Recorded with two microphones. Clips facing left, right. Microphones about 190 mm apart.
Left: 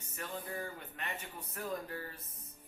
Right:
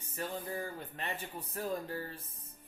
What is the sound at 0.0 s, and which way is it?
Speech, 30° right (ahead or behind).